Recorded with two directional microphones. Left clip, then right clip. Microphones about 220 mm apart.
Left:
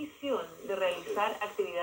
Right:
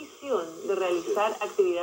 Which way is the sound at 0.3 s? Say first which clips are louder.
Right 6 dB; 50° right (ahead or behind).